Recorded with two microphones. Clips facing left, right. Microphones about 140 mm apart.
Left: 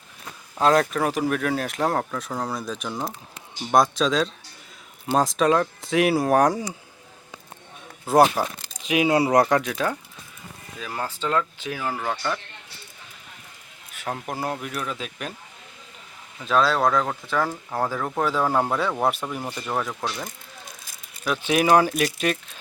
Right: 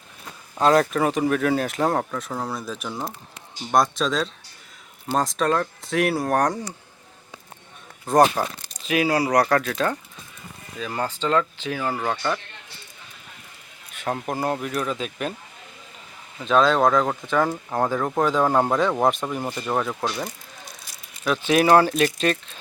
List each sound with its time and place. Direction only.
0.5 s speech: centre (ahead or behind)
8.0 s speech: 5° left (ahead or behind)
8.8 s speech: 15° left (ahead or behind)
11.9 s speech: 10° right (ahead or behind)
14.1 s speech: centre (ahead or behind)
16.4 s speech: 5° left (ahead or behind); by 17.8 s 15° right (ahead or behind)
17.8 s speech: centre (ahead or behind)
19.4 s speech: 5° right (ahead or behind)
21.2 s speech: 10° left (ahead or behind)